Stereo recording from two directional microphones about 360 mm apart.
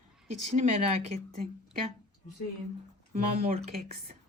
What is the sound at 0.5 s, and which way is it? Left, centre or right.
Speech, centre.